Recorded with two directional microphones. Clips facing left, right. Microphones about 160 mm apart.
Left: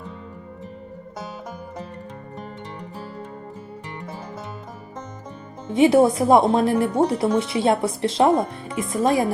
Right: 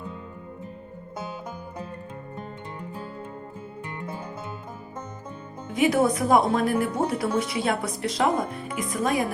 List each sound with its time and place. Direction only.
5.6 s speech: 25° left (ahead or behind)